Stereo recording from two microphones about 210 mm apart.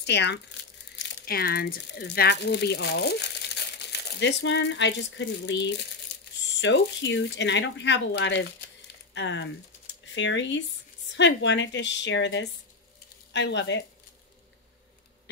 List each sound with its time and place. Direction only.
0.0 s speech: 55° left (ahead or behind)